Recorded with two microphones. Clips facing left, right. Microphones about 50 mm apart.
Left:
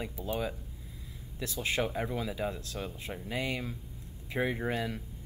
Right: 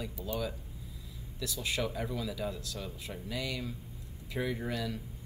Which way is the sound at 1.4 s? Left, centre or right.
Left.